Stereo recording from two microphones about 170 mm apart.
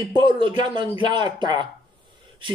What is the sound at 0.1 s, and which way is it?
A man's voice, 30° right (ahead or behind).